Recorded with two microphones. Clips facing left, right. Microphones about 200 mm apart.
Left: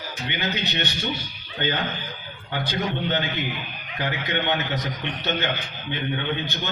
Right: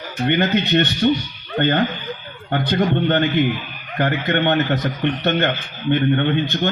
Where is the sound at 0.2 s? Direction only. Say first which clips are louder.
Right 11 dB; 55° right (ahead or behind).